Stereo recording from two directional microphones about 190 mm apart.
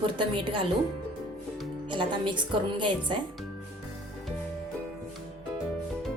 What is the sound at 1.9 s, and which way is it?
A woman's voice, 25° right (ahead or behind).